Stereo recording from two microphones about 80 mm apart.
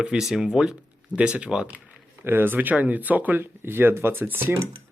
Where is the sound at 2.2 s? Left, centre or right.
Right.